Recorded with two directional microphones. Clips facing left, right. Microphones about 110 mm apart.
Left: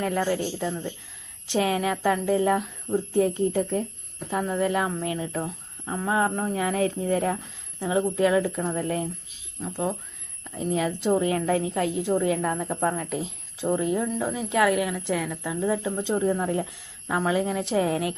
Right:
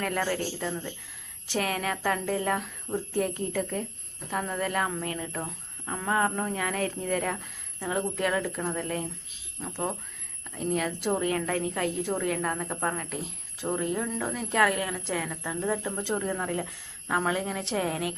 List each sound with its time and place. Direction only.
0.0 s a woman's voice: 15° left (ahead or behind)
8.7 s speech: 30° left (ahead or behind)
10.8 s a woman's voice: 20° left (ahead or behind)